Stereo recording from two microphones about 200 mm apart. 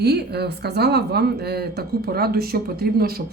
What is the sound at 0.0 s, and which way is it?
A woman's voice, 55° right (ahead or behind).